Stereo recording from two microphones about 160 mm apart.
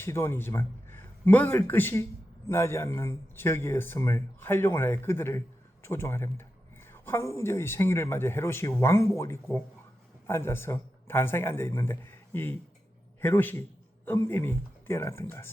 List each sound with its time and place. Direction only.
0.0 s a man's voice: 15° left (ahead or behind)